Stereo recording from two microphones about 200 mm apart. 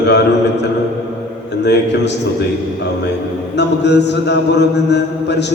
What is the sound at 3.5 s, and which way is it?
A man's voice, 60° left (ahead or behind).